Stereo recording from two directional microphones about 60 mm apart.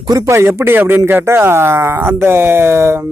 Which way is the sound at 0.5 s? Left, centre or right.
Right.